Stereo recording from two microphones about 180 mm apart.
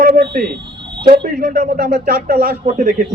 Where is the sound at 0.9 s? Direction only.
25° right (ahead or behind).